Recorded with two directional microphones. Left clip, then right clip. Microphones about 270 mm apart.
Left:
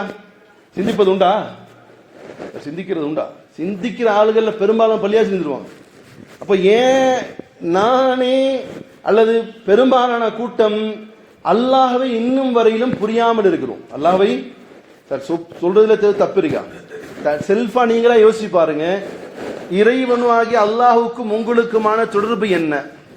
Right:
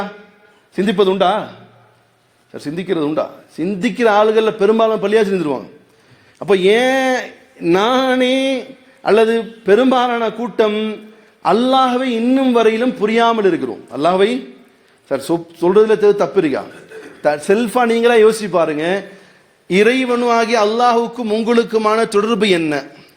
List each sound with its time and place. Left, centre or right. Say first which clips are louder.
0.8 s a man's voice: even; right
2.6 s a man's voice: right 4 dB; right